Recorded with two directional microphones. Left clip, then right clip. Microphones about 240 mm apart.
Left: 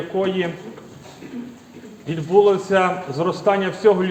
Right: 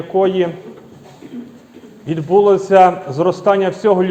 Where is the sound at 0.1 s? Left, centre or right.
Right.